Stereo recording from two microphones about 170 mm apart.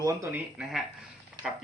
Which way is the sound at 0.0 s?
20° right (ahead or behind).